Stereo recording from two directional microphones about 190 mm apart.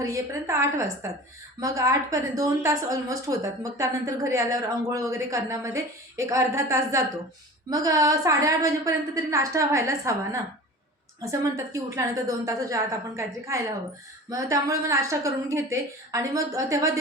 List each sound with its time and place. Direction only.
0.0 s a woman's voice: 15° right (ahead or behind)
11.2 s a woman's voice: 15° right (ahead or behind)